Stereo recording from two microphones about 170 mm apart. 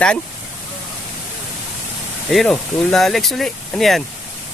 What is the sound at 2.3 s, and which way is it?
Speech, centre (ahead or behind).